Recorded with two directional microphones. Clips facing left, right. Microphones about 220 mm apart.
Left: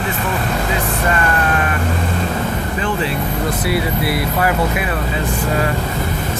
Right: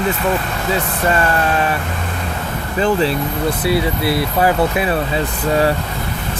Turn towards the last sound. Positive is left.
turn(degrees=-25)  # may be behind; listen again after turning